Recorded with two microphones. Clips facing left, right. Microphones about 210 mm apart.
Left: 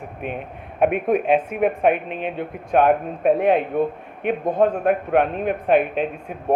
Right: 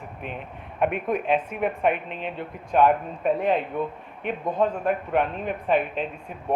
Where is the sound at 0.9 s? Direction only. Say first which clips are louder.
Left 6 dB; 55° left (ahead or behind).